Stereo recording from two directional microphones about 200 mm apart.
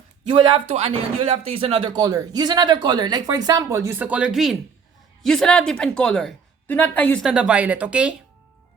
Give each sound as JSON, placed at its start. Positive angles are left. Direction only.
{"t": 0.3, "sound": "speech", "side_deg": -25}